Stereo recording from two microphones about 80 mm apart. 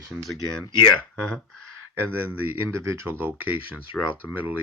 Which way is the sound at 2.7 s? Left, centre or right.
Right.